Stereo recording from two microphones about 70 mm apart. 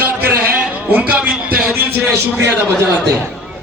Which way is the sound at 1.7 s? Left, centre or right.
Right.